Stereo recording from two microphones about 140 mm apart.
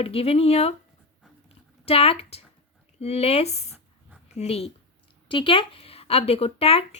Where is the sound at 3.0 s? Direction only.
50° left (ahead or behind).